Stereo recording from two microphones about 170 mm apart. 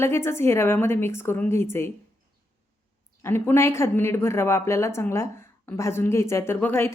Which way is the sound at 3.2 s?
15° left (ahead or behind).